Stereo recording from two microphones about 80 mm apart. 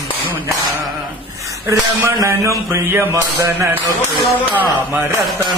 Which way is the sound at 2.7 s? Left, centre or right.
Right.